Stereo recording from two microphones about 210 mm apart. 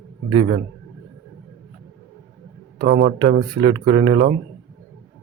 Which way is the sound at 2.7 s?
25° right (ahead or behind).